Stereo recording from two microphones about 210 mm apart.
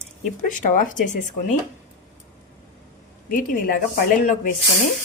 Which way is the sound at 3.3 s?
40° left (ahead or behind).